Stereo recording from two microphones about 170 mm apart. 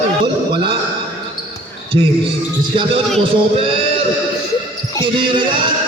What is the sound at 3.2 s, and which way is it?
Sheep, 35° right (ahead or behind).